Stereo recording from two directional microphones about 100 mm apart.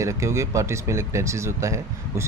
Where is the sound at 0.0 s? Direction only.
30° right (ahead or behind).